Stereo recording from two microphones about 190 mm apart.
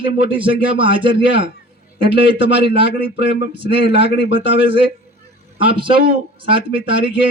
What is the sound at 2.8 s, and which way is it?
A man's voice, 65° left (ahead or behind).